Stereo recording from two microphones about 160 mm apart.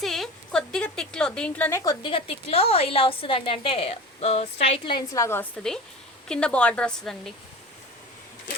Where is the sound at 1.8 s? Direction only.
25° left (ahead or behind).